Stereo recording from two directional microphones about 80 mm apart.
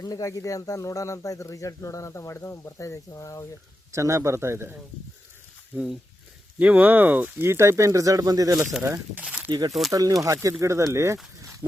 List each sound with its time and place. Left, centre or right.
0.0 s speech: left
3.9 s speech: right
5.7 s speech: centre
7.4 s speech: right
9.1 s speech: centre
9.5 s speech: right